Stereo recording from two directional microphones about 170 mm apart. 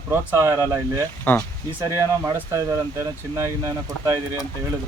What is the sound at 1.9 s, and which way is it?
Speech, 15° right (ahead or behind).